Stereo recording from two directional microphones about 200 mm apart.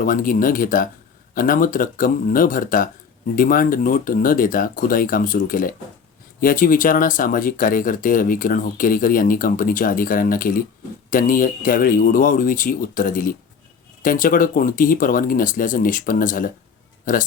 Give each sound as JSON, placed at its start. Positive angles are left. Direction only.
{"t": 0.0, "sound": "speech", "side_deg": 45}